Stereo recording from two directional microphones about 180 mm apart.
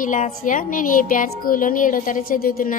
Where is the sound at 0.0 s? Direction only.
45° left (ahead or behind).